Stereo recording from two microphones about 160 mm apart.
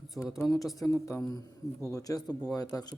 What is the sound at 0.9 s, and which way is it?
Speech, 15° left (ahead or behind).